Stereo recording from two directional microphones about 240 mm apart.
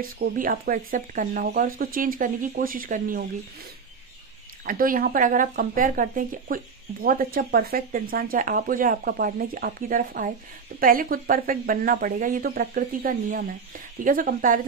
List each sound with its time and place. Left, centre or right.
0.0 s speech: right
4.6 s speech: right